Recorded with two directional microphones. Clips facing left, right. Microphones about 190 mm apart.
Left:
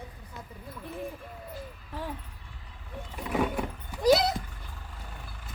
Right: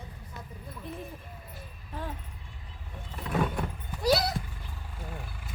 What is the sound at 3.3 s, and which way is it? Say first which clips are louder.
Vehicle: left 1 dB; 10° left (ahead or behind).